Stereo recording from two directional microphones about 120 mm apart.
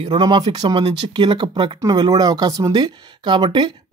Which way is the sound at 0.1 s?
35° right (ahead or behind).